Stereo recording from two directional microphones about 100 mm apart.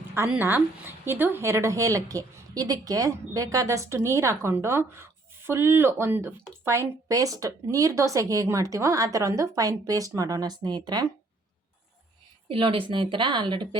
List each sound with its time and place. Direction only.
0.3 s speech: 20° right (ahead or behind); by 11.1 s 45° right (ahead or behind)
12.5 s a woman's voice: 60° right (ahead or behind)